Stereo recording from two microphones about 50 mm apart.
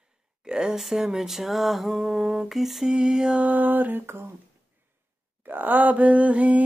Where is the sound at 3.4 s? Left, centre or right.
Right.